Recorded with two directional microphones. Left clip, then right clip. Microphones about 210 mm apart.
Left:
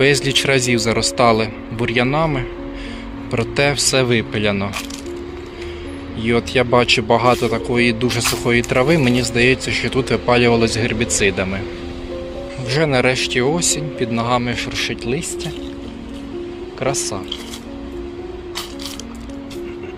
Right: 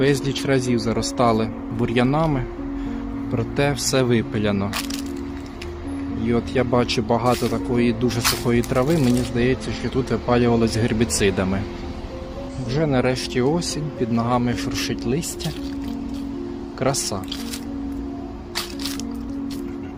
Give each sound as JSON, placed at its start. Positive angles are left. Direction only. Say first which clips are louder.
{"t": 0.0, "sound": "speech", "louder": "left 6 dB", "side_deg": 5}
{"t": 6.2, "sound": "speech", "louder": "left 6 dB", "side_deg": 5}
{"t": 10.8, "sound": "a man's voice", "louder": "left 3 dB", "side_deg": -20}
{"t": 12.7, "sound": "a man's voice", "louder": "left 5 dB", "side_deg": 0}
{"t": 16.8, "sound": "speech", "louder": "left 2 dB", "side_deg": -25}